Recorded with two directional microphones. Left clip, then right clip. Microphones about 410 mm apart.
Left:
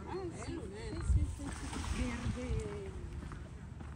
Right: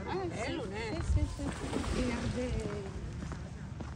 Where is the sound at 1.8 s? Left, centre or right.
Centre.